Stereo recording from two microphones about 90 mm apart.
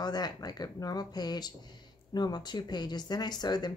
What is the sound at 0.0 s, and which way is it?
Speech, 50° left (ahead or behind).